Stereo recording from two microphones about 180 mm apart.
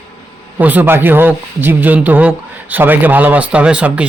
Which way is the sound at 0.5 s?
10° right (ahead or behind).